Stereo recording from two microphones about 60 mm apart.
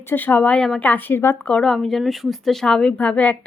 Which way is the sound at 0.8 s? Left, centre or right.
Left.